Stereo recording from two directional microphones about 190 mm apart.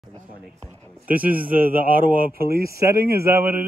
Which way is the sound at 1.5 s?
50° right (ahead or behind).